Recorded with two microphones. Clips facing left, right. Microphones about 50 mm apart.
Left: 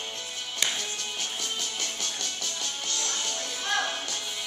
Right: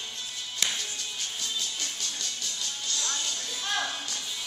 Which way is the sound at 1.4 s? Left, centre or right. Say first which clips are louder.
Left 1 dB; left.